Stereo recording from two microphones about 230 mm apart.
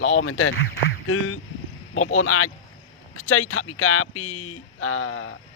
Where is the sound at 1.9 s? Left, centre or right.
Left.